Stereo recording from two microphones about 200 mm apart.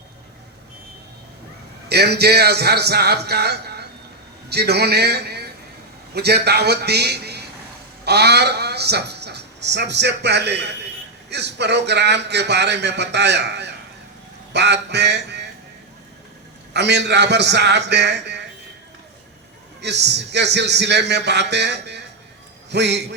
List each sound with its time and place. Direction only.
1.9 s a man's voice: 55° right (ahead or behind)
16.7 s a man's voice: 60° right (ahead or behind)
19.8 s a man's voice: 60° right (ahead or behind)